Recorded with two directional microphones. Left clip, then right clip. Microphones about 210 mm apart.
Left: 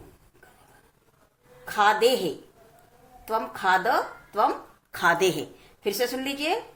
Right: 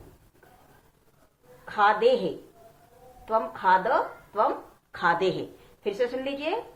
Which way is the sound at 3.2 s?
55° left (ahead or behind).